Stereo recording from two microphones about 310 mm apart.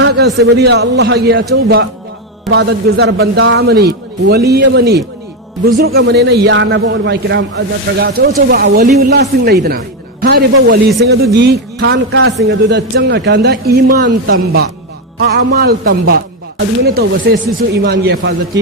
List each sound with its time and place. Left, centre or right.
0.0 s a man's voice: right